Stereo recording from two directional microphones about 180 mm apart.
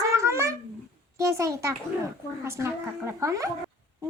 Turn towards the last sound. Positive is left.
turn(degrees=-15)  # may be behind; listen again after turning